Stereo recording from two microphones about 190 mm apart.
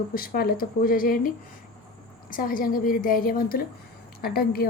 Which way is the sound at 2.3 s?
45° left (ahead or behind).